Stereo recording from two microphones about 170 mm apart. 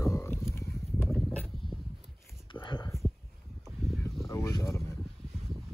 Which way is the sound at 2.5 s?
25° left (ahead or behind).